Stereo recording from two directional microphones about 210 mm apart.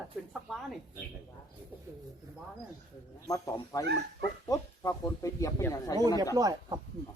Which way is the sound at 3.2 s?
15° left (ahead or behind).